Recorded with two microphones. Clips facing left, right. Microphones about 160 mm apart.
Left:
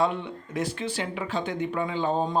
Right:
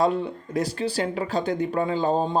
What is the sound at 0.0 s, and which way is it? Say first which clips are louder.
Speech: right 4 dB; 35° right (ahead or behind).